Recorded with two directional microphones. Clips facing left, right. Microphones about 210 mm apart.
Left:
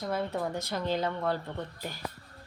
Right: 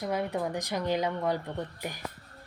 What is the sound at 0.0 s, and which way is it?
Speech, 15° right (ahead or behind).